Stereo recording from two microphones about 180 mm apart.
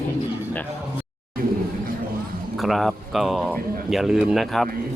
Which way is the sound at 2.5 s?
Centre (ahead or behind).